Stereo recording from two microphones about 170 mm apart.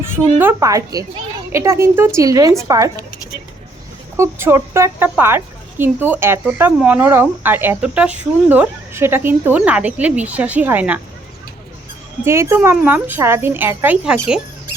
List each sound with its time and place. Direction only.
0.0 s a woman's voice: 15° right (ahead or behind)
4.2 s speech: 15° right (ahead or behind)
12.2 s speech: 15° right (ahead or behind)